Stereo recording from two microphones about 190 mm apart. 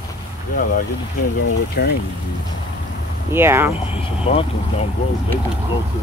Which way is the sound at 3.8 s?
30° left (ahead or behind).